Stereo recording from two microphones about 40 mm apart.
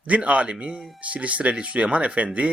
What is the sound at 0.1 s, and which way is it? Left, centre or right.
A man's voice, right.